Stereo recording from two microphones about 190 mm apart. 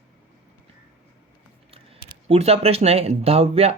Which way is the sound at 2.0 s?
35° right (ahead or behind).